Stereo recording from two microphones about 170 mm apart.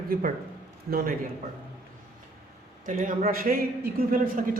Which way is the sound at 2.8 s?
50° right (ahead or behind).